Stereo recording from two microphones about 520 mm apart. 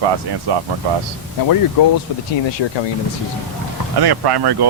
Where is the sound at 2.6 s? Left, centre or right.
Left.